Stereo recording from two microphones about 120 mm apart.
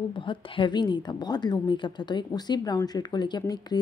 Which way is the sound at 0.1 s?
45° left (ahead or behind).